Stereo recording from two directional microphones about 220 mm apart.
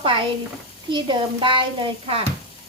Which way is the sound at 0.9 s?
20° right (ahead or behind).